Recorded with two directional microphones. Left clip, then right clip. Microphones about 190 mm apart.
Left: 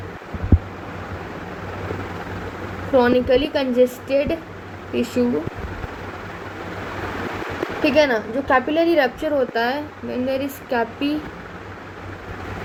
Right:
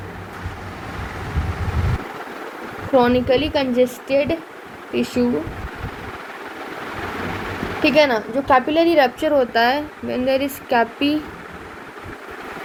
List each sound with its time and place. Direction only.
2.9 s a woman's voice: 30° right (ahead or behind)
7.8 s speech: 30° right (ahead or behind)